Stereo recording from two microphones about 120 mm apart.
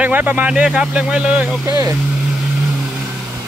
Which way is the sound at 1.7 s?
30° right (ahead or behind).